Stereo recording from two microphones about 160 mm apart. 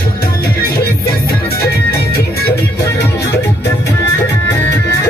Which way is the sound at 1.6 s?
75° left (ahead or behind).